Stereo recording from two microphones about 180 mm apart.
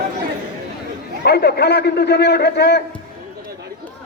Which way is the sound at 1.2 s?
65° left (ahead or behind).